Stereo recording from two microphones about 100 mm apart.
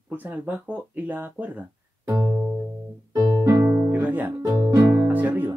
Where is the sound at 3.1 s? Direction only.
40° right (ahead or behind).